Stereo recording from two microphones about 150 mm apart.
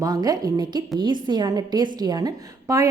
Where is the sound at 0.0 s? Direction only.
25° right (ahead or behind).